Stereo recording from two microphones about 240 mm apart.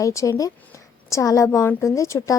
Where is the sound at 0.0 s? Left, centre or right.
Centre.